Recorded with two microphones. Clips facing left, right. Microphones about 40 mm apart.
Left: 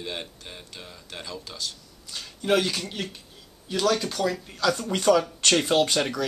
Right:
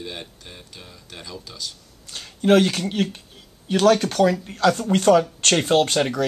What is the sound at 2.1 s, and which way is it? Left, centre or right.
Speech, right.